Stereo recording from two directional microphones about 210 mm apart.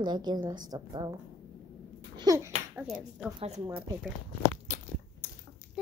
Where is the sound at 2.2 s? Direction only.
15° right (ahead or behind).